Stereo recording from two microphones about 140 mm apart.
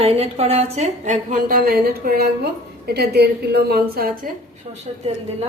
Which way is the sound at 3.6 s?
90° right.